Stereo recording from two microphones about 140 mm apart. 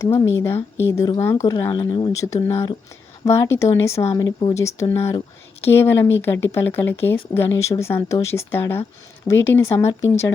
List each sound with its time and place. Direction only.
0.0 s a woman's voice: 15° left (ahead or behind)
1.7 s speech: 30° left (ahead or behind)
2.2 s a woman's voice: 20° left (ahead or behind)